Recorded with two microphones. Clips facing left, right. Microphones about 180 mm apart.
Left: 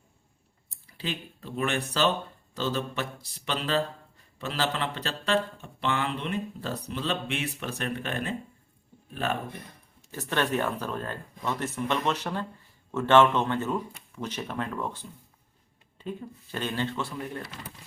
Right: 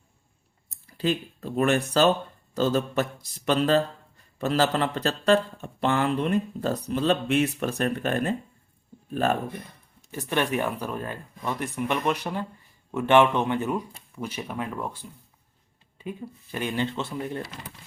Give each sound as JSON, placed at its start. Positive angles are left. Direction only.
{"t": 0.7, "sound": "speech", "side_deg": -45}
{"t": 10.1, "sound": "speech", "side_deg": -15}